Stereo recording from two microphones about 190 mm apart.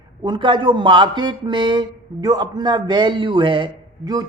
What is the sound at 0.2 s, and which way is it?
A man's voice, 25° right (ahead or behind).